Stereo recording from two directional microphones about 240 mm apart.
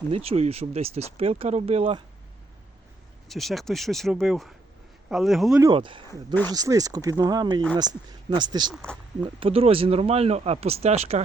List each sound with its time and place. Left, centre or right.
0.1 s speech: right
3.2 s speech: centre
5.5 s speech: centre
6.1 s speech: centre
6.5 s speech: centre
8.7 s speech: centre
9.2 s speech: right